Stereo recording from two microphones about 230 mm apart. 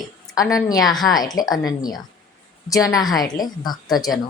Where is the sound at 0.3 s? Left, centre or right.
Centre.